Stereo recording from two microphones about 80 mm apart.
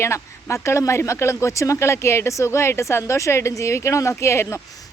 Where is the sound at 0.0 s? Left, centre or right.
Left.